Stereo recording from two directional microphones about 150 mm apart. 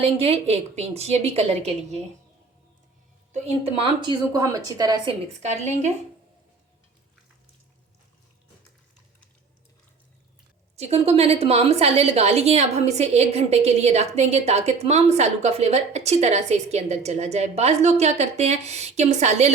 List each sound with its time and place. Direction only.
0.0 s a woman's voice: 40° right (ahead or behind)
4.0 s a woman's voice: 25° right (ahead or behind)
10.8 s a woman's voice: 45° right (ahead or behind)